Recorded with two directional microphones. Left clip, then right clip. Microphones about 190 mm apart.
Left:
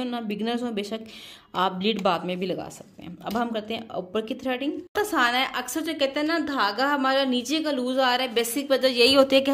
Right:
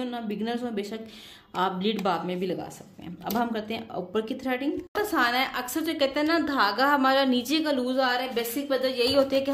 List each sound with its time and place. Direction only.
0.0 s speech: 30° left (ahead or behind)
3.3 s a woman's voice: 15° left (ahead or behind)
4.9 s a woman's voice: 25° left (ahead or behind)
7.9 s speech: 35° left (ahead or behind)
8.4 s a woman's voice: 55° left (ahead or behind)